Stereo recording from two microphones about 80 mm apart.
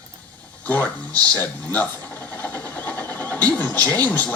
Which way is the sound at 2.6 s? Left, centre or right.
Left.